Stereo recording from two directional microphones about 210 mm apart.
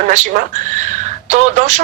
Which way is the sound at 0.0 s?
35° right (ahead or behind).